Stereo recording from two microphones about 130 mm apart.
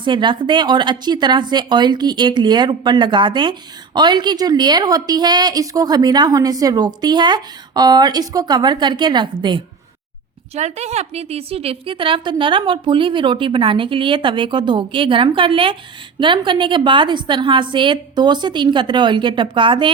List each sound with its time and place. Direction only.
0.0 s a woman's voice: 35° right (ahead or behind)
10.5 s a woman's voice: 60° right (ahead or behind); by 19.9 s 40° right (ahead or behind)